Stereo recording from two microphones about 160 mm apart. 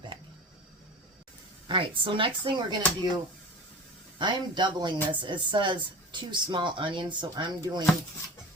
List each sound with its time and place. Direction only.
1.6 s speech: 30° right (ahead or behind)
4.2 s speech: 30° right (ahead or behind)